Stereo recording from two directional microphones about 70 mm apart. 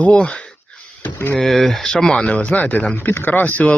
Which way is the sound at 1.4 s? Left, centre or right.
Centre.